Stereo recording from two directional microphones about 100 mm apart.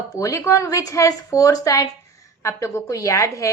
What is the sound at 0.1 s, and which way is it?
Speech, 35° left (ahead or behind).